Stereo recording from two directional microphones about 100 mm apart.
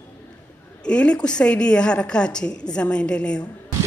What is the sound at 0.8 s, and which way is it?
A woman's voice, 10° left (ahead or behind).